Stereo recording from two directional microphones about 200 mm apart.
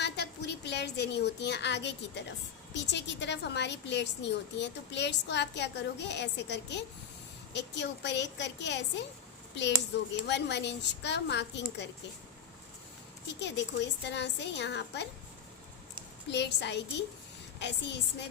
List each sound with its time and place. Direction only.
0.0 s a woman's voice: 60° left (ahead or behind)
13.2 s a woman's voice: 60° left (ahead or behind)
16.3 s a woman's voice: 60° left (ahead or behind)